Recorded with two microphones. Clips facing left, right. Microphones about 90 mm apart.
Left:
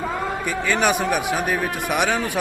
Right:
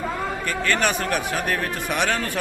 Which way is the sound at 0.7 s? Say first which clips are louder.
Left 3 dB; 10° left (ahead or behind).